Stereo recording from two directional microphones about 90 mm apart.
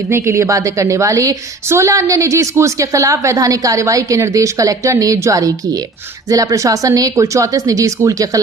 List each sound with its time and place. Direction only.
0.1 s a woman's voice: 30° right (ahead or behind)